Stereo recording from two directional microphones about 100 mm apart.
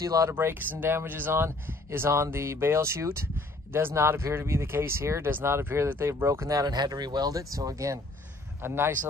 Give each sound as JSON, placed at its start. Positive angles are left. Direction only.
{"t": 0.0, "sound": "speech", "side_deg": -35}
{"t": 0.3, "sound": "speech", "side_deg": -25}